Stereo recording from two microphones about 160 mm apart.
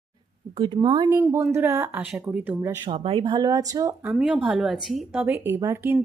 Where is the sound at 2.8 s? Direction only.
35° right (ahead or behind).